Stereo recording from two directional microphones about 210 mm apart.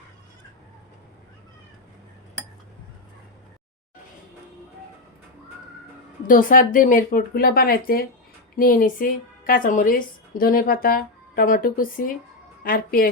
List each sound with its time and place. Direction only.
6.2 s a woman's voice: 40° left (ahead or behind)